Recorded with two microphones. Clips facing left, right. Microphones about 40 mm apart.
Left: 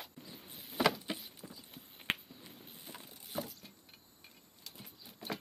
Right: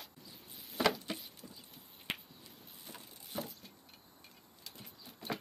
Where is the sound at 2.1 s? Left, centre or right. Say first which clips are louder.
Left 5 dB; left.